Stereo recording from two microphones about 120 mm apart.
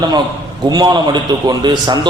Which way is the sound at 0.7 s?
35° right (ahead or behind).